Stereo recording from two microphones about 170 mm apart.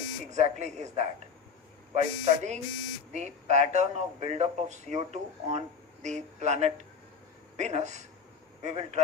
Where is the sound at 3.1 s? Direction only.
40° right (ahead or behind).